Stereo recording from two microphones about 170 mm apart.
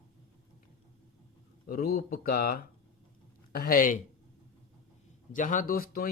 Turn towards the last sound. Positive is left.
turn(degrees=60)  # may be behind; listen again after turning